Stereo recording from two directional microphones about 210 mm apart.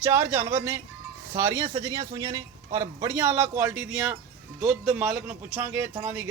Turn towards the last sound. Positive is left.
turn(degrees=-10)  # may be behind; listen again after turning